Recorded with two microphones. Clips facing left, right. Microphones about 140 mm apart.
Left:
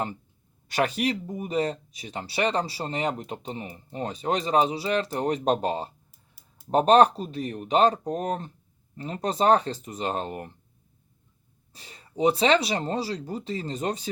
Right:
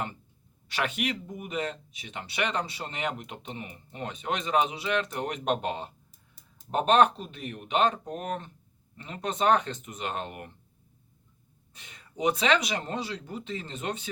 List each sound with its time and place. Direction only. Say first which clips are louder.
0.7 s speech: left 5 dB; 40° left (ahead or behind)
11.7 s speech: left 6 dB; 35° left (ahead or behind)